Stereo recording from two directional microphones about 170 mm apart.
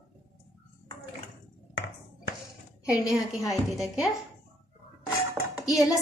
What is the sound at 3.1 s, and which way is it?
A woman's voice, centre (ahead or behind).